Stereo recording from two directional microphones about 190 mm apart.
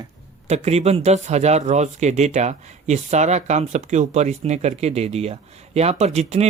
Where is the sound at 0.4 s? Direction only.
35° right (ahead or behind).